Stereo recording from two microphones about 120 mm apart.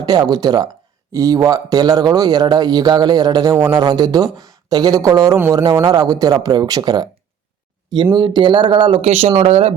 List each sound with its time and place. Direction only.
0.0 s speech: 35° right (ahead or behind)
8.1 s speech: 40° right (ahead or behind)
9.0 s speech: 55° right (ahead or behind)